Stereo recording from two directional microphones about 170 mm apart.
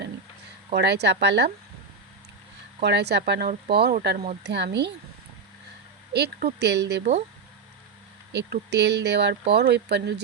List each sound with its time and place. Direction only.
0.8 s speech: 80° right
2.8 s speech: 80° right
4.4 s speech: 90° right
6.1 s speech: 75° right (ahead or behind)
7.0 s speech: 40° right (ahead or behind)
8.3 s speech: 90° right
9.5 s speech: 75° right (ahead or behind)